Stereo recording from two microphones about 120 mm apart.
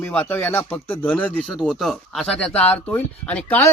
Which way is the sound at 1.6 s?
Centre (ahead or behind).